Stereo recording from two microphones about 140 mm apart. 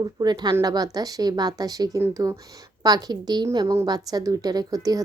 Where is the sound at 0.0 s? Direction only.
30° right (ahead or behind).